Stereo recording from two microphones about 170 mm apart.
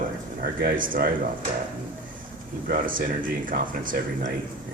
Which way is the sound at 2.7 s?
55° right (ahead or behind).